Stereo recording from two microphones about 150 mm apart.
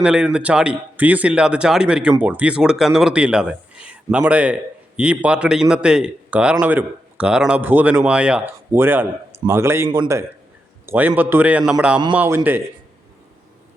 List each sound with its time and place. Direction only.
0.0 s a man's voice: 5° right (ahead or behind)